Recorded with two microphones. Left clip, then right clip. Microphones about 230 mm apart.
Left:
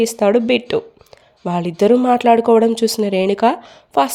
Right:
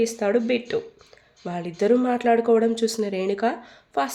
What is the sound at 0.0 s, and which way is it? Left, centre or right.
Speech, left.